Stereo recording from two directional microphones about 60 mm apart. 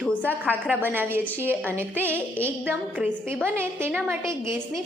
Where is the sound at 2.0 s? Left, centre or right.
Left.